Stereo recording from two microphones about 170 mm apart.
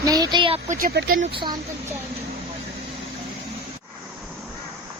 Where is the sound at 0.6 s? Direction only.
50° right (ahead or behind).